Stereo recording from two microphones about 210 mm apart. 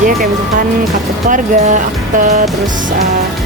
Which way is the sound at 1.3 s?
40° right (ahead or behind).